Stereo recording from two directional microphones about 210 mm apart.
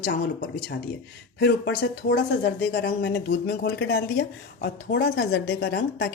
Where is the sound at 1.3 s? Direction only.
50° left (ahead or behind).